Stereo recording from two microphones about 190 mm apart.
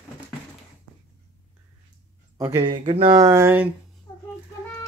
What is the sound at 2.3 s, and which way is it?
Speech, 20° right (ahead or behind).